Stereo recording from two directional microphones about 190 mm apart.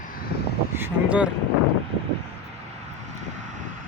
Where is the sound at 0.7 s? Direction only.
10° right (ahead or behind).